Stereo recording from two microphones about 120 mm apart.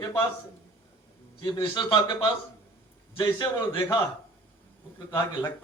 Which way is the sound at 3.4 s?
35° left (ahead or behind).